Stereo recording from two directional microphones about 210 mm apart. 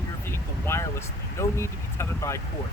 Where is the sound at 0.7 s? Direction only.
10° left (ahead or behind).